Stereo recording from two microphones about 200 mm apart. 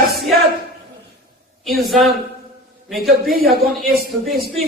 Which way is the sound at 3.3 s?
50° right (ahead or behind).